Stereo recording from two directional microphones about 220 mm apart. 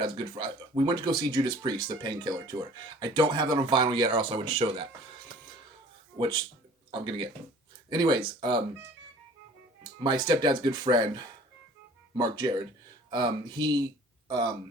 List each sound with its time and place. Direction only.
0.0 s speech: 20° right (ahead or behind)
6.1 s speech: 20° right (ahead or behind)
10.0 s speech: 20° right (ahead or behind)